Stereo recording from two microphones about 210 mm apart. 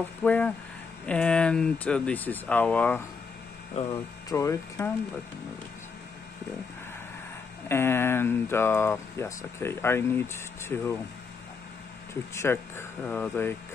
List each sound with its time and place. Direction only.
0.2 s speech: 5° left (ahead or behind)
3.8 s speech: 30° left (ahead or behind)
4.3 s speech: 15° left (ahead or behind)
7.6 s speech: 10° left (ahead or behind)
12.1 s speech: 10° left (ahead or behind)